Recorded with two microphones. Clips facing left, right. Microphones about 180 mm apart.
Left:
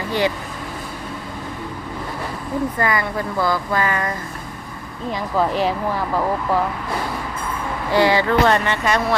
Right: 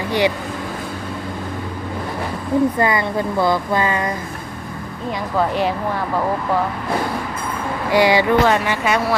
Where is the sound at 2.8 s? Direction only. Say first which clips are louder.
Right 3 dB; 20° right (ahead or behind).